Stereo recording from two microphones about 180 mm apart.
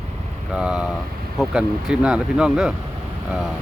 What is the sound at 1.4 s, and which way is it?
Speech, 5° right (ahead or behind).